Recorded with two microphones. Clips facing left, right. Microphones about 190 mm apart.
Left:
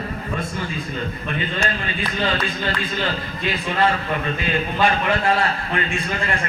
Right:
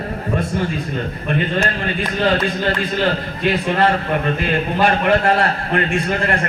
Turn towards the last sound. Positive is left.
turn(degrees=-60)  # may be behind; listen again after turning